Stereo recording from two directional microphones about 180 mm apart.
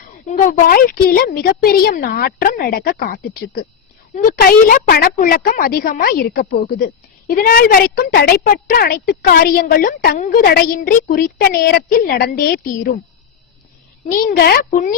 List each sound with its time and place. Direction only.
0.3 s a woman's voice: 45° left (ahead or behind)
14.1 s a woman's voice: 50° left (ahead or behind)